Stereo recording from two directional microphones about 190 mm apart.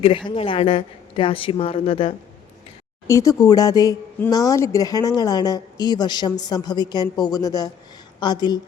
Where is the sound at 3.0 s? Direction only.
15° left (ahead or behind).